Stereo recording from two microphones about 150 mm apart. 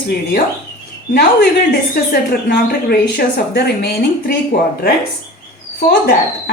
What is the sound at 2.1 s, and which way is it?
A woman's voice, 90° left.